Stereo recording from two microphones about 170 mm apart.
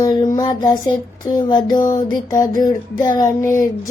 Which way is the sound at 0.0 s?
25° left (ahead or behind).